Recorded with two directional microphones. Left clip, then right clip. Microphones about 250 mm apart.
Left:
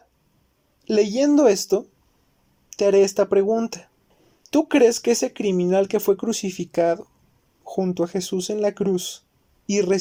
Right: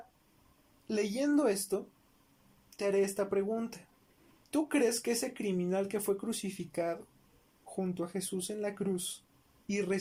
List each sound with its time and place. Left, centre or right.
0.9 s speech: left